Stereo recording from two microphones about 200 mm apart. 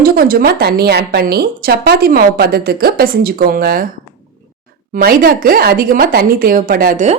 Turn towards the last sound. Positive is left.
turn(degrees=-40)  # may be behind; listen again after turning